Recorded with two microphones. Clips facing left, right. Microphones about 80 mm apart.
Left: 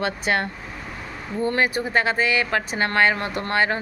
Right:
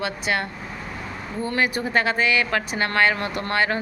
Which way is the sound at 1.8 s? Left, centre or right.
Left.